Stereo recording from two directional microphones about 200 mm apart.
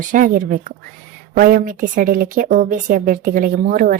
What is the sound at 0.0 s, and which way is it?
A woman's voice, 40° right (ahead or behind).